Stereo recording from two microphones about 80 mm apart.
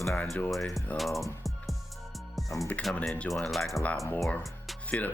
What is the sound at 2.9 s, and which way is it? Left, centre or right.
Speech, centre.